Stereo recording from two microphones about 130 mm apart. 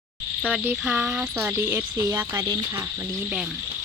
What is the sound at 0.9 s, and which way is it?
Speech, 5° right (ahead or behind).